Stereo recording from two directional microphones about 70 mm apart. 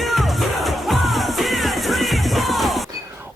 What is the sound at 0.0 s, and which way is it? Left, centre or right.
Music, centre.